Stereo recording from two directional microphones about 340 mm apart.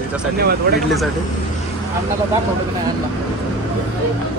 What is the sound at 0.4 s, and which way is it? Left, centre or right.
Speech, right.